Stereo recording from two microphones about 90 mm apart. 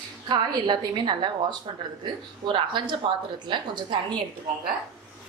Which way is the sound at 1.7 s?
70° right (ahead or behind).